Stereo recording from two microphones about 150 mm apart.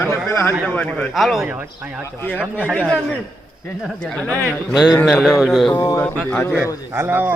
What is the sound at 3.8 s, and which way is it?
Speech, 5° left (ahead or behind).